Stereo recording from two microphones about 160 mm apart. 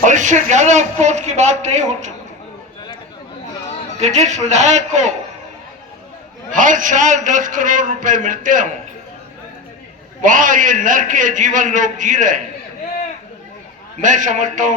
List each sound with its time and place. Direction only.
0.0 s a sound: 50° right (ahead or behind)
0.5 s a man's voice: 45° right (ahead or behind)
4.0 s a man's voice: 45° right (ahead or behind)
6.6 s a man's voice: 55° right (ahead or behind)
10.2 s a man's voice: 55° right (ahead or behind)
14.0 s a man's voice: 50° right (ahead or behind)